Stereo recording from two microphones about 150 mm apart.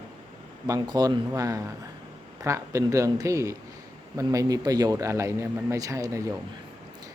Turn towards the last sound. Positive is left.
turn(degrees=-20)  # may be behind; listen again after turning